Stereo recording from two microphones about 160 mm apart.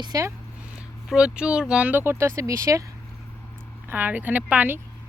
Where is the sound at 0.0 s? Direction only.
20° right (ahead or behind).